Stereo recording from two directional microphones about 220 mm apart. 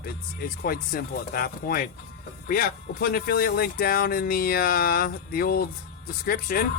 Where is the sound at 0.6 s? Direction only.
45° left (ahead or behind).